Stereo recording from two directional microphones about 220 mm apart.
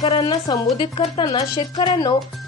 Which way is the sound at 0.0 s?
20° left (ahead or behind).